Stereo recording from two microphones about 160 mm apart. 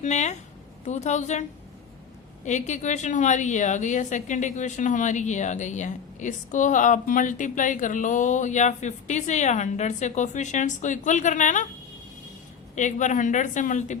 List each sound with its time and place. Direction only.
0.0 s a woman's voice: 45° left (ahead or behind)
12.7 s a woman's voice: 50° left (ahead or behind)